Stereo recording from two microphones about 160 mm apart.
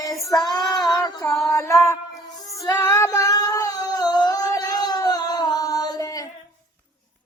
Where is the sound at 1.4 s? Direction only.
20° left (ahead or behind).